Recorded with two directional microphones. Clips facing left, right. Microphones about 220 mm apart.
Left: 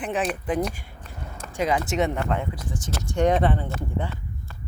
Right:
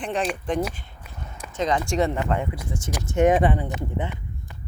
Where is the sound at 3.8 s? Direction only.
20° right (ahead or behind).